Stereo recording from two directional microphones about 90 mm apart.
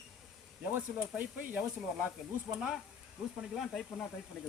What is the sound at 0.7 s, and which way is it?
Speech, 15° right (ahead or behind).